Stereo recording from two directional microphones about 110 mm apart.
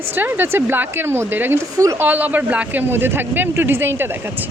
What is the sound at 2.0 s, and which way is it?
Speech, 15° right (ahead or behind).